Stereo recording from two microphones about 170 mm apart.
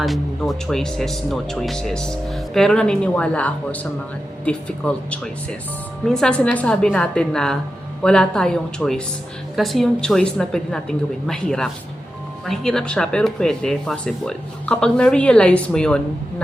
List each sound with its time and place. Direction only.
0.0 s speech: centre (ahead or behind)